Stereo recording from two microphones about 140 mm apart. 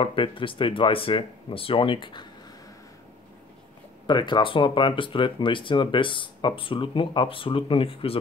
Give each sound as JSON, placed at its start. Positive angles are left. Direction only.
{"t": 0.0, "sound": "speech", "side_deg": 40}
{"t": 4.1, "sound": "speech", "side_deg": 35}